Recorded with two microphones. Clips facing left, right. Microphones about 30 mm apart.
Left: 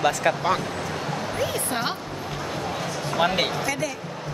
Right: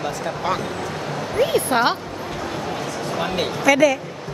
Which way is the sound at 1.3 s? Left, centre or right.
Right.